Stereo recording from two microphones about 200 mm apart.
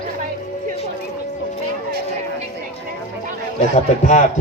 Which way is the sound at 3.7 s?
35° left (ahead or behind).